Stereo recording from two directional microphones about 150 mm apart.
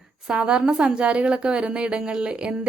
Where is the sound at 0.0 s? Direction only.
5° right (ahead or behind).